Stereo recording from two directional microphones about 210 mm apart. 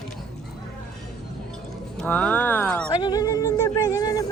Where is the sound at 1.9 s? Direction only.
5° left (ahead or behind).